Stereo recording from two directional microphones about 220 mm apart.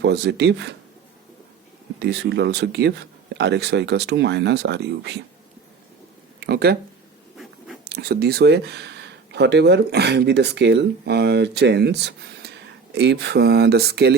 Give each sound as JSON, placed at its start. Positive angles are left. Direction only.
{"t": 0.0, "sound": "speech", "side_deg": -50}
{"t": 2.0, "sound": "speech", "side_deg": -50}
{"t": 6.4, "sound": "speech", "side_deg": -45}
{"t": 7.9, "sound": "speech", "side_deg": -45}